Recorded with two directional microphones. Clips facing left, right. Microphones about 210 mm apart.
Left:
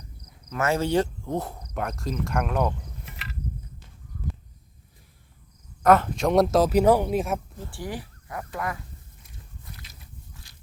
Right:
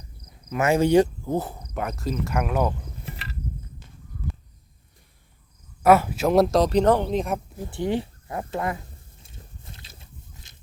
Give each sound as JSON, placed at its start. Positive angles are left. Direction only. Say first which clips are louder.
{"t": 0.5, "sound": "speech", "louder": "right 5 dB", "side_deg": -15}
{"t": 1.3, "sound": "speech", "louder": "right 3 dB", "side_deg": -5}
{"t": 3.1, "sound": "a sound", "louder": "right 6 dB", "side_deg": -30}
{"t": 5.8, "sound": "speech", "louder": "right 2 dB", "side_deg": -10}
{"t": 7.6, "sound": "speech", "louder": "right 9 dB", "side_deg": -20}
{"t": 9.2, "sound": "biting", "louder": "right 2 dB", "side_deg": -25}